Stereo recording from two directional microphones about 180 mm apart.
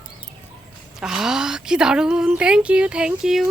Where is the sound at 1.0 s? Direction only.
5° right (ahead or behind).